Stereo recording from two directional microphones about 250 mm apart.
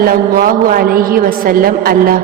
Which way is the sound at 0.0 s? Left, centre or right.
Right.